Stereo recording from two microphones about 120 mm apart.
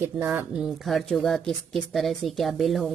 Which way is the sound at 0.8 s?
Centre (ahead or behind).